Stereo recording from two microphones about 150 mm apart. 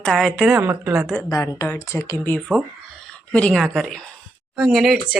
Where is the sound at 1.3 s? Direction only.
20° left (ahead or behind).